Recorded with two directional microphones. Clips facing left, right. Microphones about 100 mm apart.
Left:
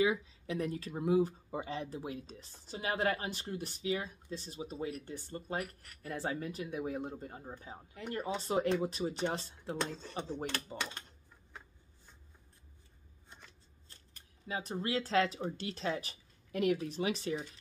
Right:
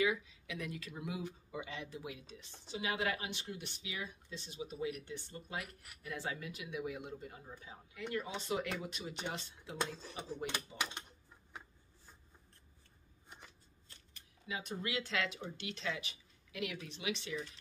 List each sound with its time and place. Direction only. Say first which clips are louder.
0.0 s speech: left 3 dB; 35° left (ahead or behind)
14.1 s speech: left 4 dB; 35° left (ahead or behind)